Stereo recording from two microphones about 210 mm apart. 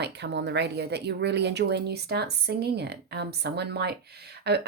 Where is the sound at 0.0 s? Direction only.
55° right (ahead or behind).